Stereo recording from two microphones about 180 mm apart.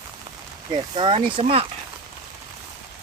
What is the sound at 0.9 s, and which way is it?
Speech, 30° right (ahead or behind).